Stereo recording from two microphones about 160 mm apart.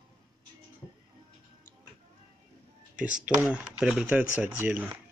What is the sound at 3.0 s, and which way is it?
Speech, 5° right (ahead or behind).